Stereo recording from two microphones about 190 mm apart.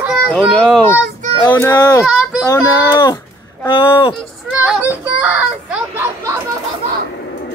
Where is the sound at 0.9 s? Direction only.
10° left (ahead or behind).